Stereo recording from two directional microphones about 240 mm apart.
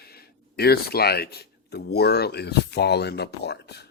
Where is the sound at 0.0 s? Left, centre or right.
Left.